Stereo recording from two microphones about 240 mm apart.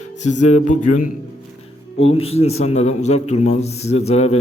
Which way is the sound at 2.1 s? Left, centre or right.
Left.